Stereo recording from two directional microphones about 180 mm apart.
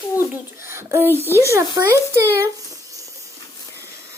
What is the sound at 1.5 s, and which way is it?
Speech, 15° right (ahead or behind).